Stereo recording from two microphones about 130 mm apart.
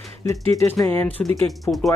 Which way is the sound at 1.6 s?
Centre (ahead or behind).